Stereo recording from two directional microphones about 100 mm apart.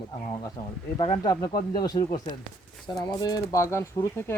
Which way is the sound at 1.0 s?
65° left (ahead or behind).